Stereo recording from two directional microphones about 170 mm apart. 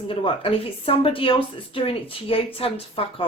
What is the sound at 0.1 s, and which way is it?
Speech, 30° left (ahead or behind).